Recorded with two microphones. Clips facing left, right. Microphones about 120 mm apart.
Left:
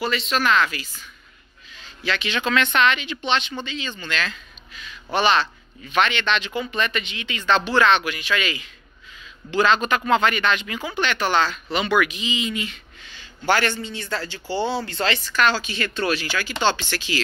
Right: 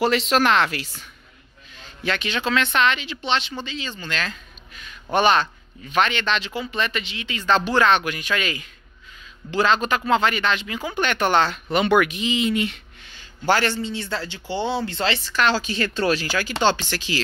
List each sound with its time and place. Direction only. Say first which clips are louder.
0.0 s speech: right 4 dB; 75° right (ahead or behind)
2.0 s speech: even; 40° right (ahead or behind)
5.1 s speech: right 2 dB; 45° right (ahead or behind)
9.5 s speech: left 1 dB; 35° right (ahead or behind)
11.0 s speech: right 2 dB; 50° right (ahead or behind)
13.5 s speech: right 1 dB; 30° right (ahead or behind)